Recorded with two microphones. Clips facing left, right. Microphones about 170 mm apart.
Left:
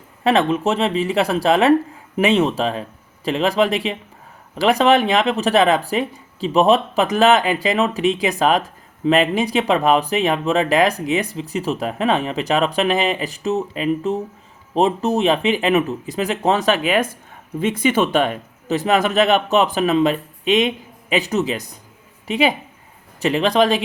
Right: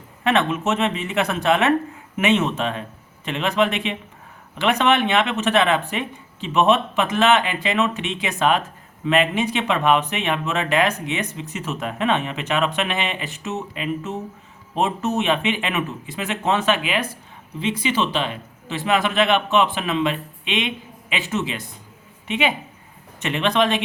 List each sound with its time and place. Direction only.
0.3 s speech: 35° left (ahead or behind)